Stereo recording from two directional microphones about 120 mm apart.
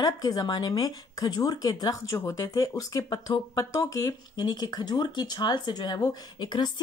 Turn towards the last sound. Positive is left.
turn(degrees=35)  # may be behind; listen again after turning